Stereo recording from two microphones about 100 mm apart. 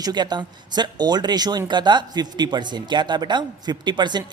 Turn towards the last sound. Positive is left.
turn(degrees=-50)  # may be behind; listen again after turning